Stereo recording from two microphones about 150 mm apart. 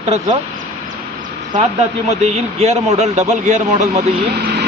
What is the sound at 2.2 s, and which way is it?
A man's voice, 45° right (ahead or behind).